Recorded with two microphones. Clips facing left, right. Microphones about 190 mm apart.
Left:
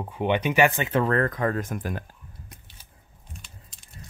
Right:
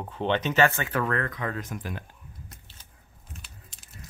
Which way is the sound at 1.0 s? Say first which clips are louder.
Left 7 dB; 40° left (ahead or behind).